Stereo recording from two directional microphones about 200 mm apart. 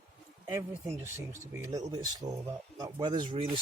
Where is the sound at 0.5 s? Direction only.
15° right (ahead or behind).